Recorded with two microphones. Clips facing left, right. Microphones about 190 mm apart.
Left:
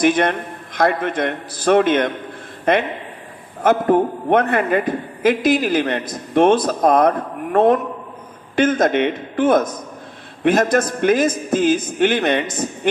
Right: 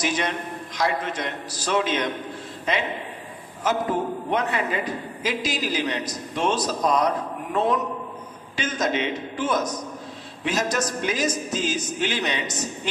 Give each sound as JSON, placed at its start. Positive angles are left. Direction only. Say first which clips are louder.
{"t": 0.0, "sound": "a man's voice", "louder": "left 9 dB", "side_deg": 55}